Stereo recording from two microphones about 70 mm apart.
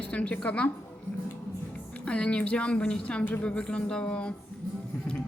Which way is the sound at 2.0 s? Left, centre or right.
Centre.